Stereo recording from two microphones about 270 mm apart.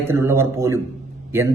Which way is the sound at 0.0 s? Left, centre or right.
Centre.